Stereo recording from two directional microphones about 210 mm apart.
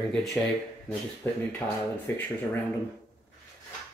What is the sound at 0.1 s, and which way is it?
Speech, centre (ahead or behind).